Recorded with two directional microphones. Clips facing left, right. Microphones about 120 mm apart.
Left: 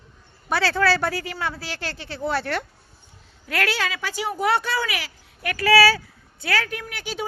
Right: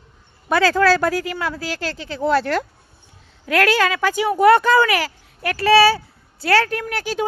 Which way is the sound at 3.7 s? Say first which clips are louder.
Right 9 dB; 50° right (ahead or behind).